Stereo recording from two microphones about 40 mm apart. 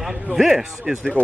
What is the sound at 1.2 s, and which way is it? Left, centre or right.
Speech, left.